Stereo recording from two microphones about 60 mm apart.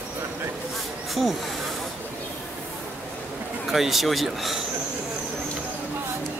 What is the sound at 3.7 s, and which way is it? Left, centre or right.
Speech, centre.